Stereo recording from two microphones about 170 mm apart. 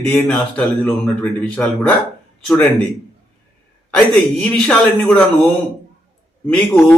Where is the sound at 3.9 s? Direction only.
5° left (ahead or behind).